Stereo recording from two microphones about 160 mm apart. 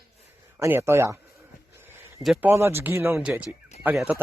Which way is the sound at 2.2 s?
Centre (ahead or behind).